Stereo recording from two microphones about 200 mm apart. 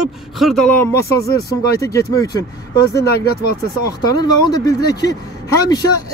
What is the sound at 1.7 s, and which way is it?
Speech, 15° left (ahead or behind).